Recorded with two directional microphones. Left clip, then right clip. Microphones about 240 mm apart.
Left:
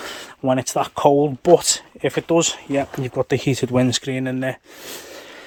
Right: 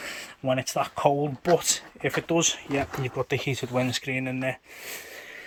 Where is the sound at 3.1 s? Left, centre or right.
Left.